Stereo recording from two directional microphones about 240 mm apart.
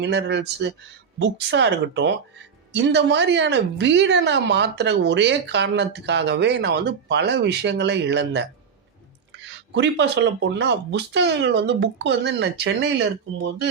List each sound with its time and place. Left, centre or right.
0.0 s a woman's voice: right